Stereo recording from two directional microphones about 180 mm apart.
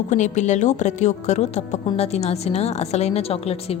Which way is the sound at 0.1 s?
40° left (ahead or behind).